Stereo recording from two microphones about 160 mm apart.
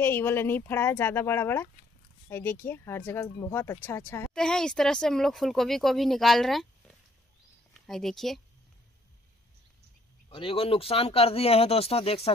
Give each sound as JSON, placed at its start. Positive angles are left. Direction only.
{"t": 0.0, "sound": "speech", "side_deg": 15}
{"t": 4.3, "sound": "speech", "side_deg": 5}
{"t": 7.8, "sound": "speech", "side_deg": 0}
{"t": 10.3, "sound": "speech", "side_deg": 35}